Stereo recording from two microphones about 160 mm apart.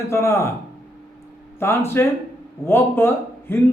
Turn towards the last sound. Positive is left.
turn(degrees=15)  # may be behind; listen again after turning